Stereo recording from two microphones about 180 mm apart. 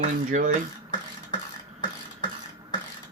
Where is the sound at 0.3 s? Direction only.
45° right (ahead or behind).